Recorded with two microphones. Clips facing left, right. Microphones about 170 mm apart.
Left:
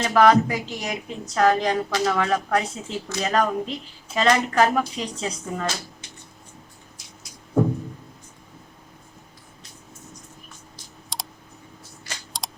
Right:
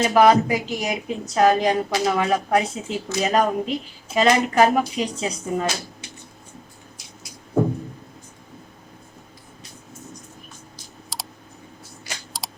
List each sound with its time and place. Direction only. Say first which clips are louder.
0.0 s a woman's voice: right 1 dB; 10° right (ahead or behind)
11.1 s computer keyboard: even; centre (ahead or behind)
12.3 s computer keyboard: left 1 dB; centre (ahead or behind)